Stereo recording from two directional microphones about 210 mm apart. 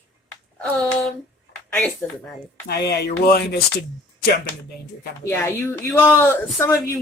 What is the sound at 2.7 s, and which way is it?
Speech, 50° left (ahead or behind).